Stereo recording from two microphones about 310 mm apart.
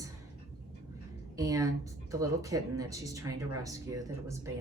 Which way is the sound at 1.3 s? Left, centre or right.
Centre.